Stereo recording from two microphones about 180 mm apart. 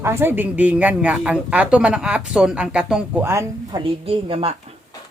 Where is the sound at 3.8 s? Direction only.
30° right (ahead or behind).